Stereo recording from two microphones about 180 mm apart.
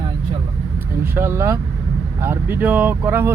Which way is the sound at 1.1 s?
10° right (ahead or behind).